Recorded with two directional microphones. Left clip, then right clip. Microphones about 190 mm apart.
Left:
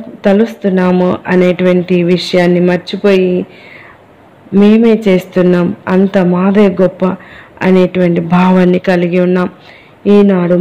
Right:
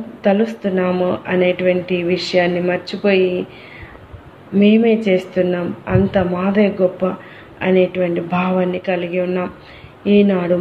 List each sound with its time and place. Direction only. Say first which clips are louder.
0.2 s speech: left 6 dB; 40° left (ahead or behind)
4.6 s a man's voice: left 5 dB; 40° left (ahead or behind)